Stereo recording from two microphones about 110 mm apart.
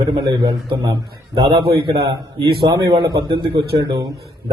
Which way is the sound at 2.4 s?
40° right (ahead or behind).